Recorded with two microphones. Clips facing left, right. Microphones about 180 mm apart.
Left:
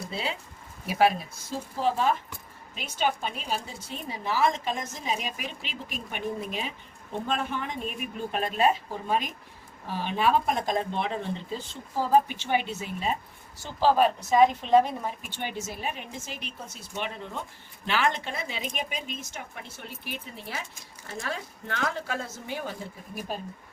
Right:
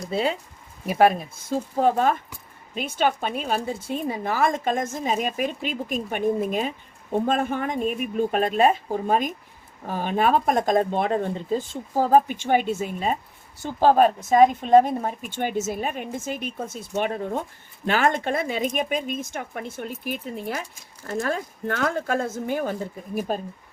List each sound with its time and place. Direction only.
0.1 s a woman's voice: 50° right (ahead or behind)